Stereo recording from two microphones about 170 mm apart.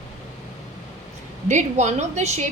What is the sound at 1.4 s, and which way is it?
A woman's voice, 45° right (ahead or behind).